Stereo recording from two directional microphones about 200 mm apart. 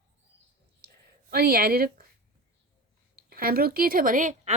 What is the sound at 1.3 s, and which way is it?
Speech, 50° right (ahead or behind).